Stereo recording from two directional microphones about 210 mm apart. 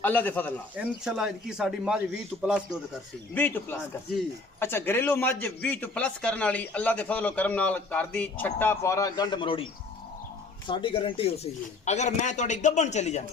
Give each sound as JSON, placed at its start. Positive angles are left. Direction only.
{"t": 0.0, "sound": "a man's voice", "side_deg": 10}
{"t": 0.7, "sound": "a man's voice", "side_deg": -5}
{"t": 3.3, "sound": "a man's voice", "side_deg": 10}
{"t": 10.7, "sound": "speech", "side_deg": 25}